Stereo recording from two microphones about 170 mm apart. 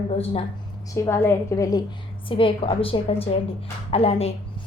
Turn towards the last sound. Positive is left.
turn(degrees=35)  # may be behind; listen again after turning